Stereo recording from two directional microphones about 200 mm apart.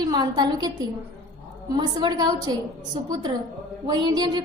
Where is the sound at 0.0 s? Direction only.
20° right (ahead or behind).